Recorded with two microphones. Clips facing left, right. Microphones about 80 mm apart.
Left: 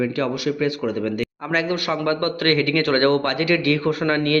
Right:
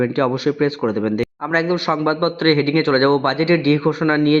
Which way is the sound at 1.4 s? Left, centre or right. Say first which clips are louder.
Right 4 dB; right.